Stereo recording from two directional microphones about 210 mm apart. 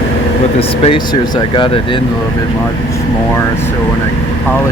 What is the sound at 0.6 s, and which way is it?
Speech, 25° left (ahead or behind).